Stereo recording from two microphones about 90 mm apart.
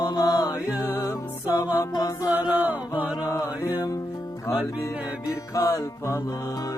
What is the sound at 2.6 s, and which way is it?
Chant, 15° right (ahead or behind).